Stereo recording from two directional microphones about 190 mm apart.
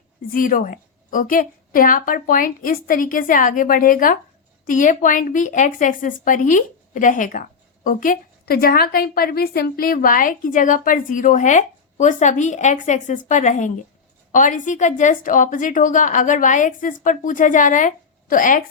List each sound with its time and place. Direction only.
0.3 s a woman's voice: 45° left (ahead or behind)